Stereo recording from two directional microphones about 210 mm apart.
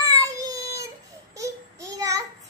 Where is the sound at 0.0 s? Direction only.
15° right (ahead or behind).